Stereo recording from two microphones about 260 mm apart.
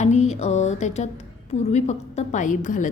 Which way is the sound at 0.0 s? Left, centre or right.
Left.